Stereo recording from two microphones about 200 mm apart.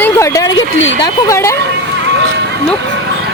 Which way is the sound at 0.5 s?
70° left (ahead or behind).